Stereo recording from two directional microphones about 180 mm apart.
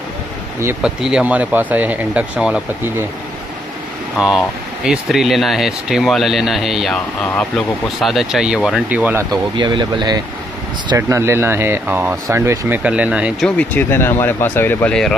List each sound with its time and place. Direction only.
0.6 s speech: 15° right (ahead or behind)
4.8 s speech: 5° right (ahead or behind)
9.3 s speech: 25° right (ahead or behind); by 13.5 s 5° right (ahead or behind)
13.6 s speech: 10° left (ahead or behind)